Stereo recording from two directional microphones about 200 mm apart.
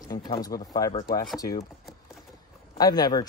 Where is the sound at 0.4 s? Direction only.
20° left (ahead or behind).